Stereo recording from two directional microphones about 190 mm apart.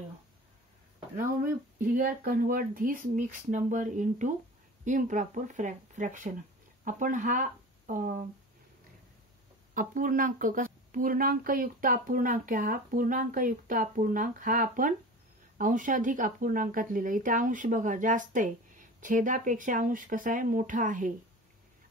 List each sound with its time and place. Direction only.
1.1 s speech: 45° right (ahead or behind)
9.8 s speech: 45° right (ahead or behind)